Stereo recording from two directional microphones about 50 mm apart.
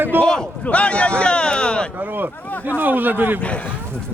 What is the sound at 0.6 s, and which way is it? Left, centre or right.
Speech, left.